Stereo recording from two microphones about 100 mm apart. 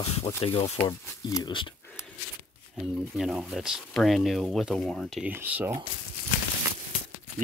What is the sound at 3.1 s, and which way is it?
Speech, 5° right (ahead or behind).